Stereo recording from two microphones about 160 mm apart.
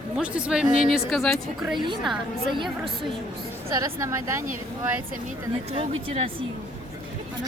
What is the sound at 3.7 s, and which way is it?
Speech, 20° right (ahead or behind).